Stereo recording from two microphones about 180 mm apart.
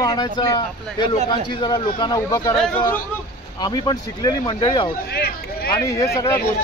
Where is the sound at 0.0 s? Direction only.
20° left (ahead or behind).